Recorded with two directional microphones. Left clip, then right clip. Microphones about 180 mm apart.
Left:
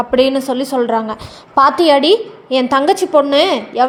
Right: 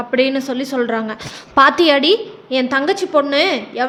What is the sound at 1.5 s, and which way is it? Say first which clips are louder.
Speech: even; 15° right (ahead or behind).